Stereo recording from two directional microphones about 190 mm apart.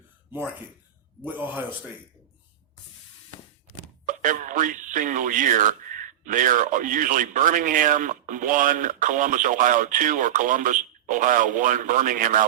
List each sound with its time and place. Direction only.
1.2 s a man's voice: 10° right (ahead or behind)
4.0 s speech: 45° right (ahead or behind)